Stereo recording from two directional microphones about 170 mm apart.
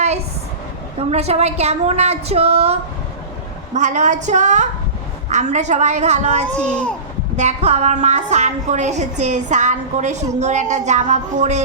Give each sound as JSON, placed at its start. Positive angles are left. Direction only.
{"t": 0.9, "sound": "a woman's voice", "side_deg": -35}
{"t": 3.8, "sound": "a woman's voice", "side_deg": -45}
{"t": 6.6, "sound": "speech", "side_deg": 5}
{"t": 7.3, "sound": "a woman's voice", "side_deg": -40}